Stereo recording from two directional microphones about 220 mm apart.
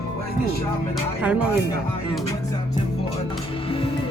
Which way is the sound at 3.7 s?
25° left (ahead or behind).